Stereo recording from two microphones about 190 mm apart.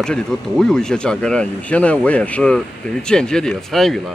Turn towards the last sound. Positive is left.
turn(degrees=0)  # may be behind; listen again after turning